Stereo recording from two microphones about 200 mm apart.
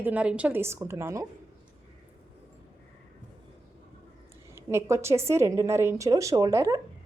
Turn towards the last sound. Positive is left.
turn(degrees=-15)  # may be behind; listen again after turning